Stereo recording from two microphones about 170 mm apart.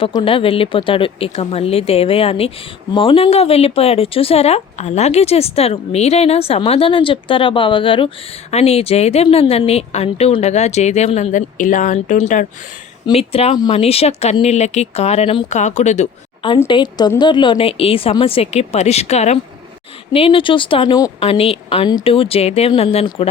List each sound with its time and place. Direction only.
0.0 s speech: 30° left (ahead or behind)
13.1 s speech: 35° left (ahead or behind)
16.6 s a woman's voice: 25° left (ahead or behind)